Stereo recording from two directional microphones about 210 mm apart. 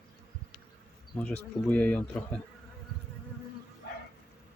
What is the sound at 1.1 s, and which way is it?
Speech, 5° left (ahead or behind).